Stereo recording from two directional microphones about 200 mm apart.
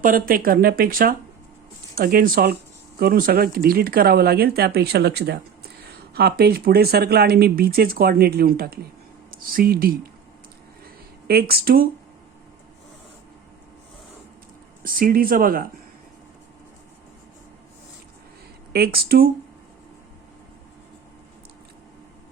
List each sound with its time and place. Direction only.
0.0 s speech: 45° right (ahead or behind)
11.3 s speech: 50° right (ahead or behind)
14.8 s speech: 45° right (ahead or behind)
18.7 s speech: 50° right (ahead or behind)